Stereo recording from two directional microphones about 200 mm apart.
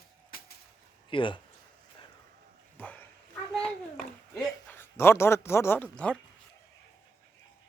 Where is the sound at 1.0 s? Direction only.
25° left (ahead or behind).